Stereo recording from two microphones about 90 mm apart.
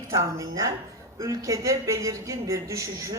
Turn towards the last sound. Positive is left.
turn(degrees=-40)  # may be behind; listen again after turning